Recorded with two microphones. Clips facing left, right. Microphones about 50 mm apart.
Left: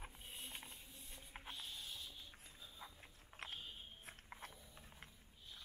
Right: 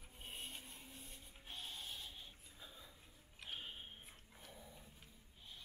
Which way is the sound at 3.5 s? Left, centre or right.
Right.